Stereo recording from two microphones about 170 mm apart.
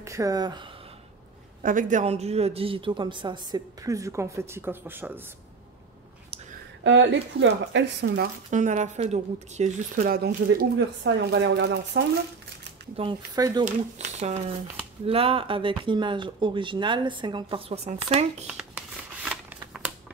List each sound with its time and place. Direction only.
0.0 s a woman's voice: 20° right (ahead or behind)
1.6 s a woman's voice: 50° right (ahead or behind); by 5.2 s 10° right (ahead or behind)
6.8 s speech: 90° right
8.5 s speech: 45° right (ahead or behind)
10.1 s speech: 65° right (ahead or behind); by 12.0 s 90° right
12.9 s speech: 30° right (ahead or behind)
13.4 s a woman's voice: 20° right (ahead or behind)
13.7 s a woman's voice: 45° right (ahead or behind)
18.5 s shuffling cards: 5° right (ahead or behind)